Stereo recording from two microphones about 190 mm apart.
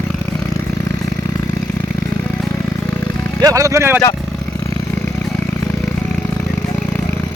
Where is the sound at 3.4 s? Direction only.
15° right (ahead or behind).